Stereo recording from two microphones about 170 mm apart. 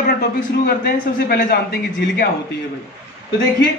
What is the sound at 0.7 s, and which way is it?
A man's voice, 65° left (ahead or behind).